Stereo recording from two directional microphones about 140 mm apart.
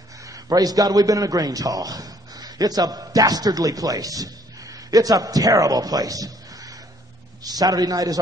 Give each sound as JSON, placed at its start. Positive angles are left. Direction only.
{"t": 0.2, "sound": "a man's voice", "side_deg": -25}